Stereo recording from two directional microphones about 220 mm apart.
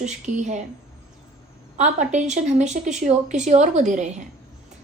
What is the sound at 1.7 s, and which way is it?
A woman's voice, 30° right (ahead or behind).